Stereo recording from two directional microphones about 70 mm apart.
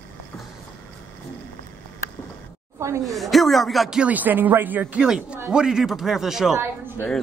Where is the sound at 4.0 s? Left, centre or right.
Right.